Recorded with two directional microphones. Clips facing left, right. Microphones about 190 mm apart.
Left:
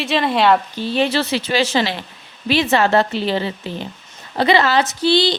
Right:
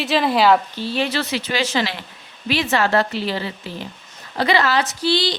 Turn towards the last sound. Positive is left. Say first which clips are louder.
# left 4 dB
turn(degrees=25)  # may be behind; listen again after turning